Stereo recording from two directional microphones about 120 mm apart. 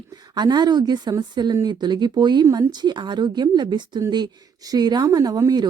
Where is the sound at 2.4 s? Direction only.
25° right (ahead or behind).